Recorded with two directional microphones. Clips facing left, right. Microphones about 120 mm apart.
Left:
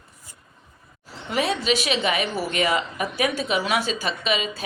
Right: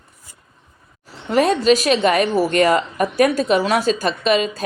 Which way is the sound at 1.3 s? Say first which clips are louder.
Right 8 dB; 45° right (ahead or behind).